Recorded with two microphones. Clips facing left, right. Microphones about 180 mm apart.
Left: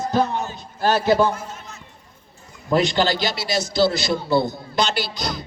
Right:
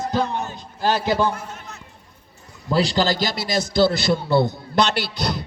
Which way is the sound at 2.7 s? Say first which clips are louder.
Left 1 dB; 35° right (ahead or behind).